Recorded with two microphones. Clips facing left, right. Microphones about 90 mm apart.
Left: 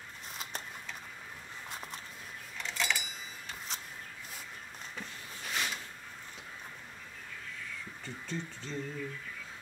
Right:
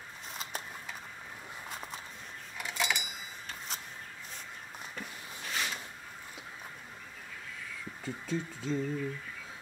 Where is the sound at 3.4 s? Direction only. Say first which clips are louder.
Right 1 dB; centre (ahead or behind).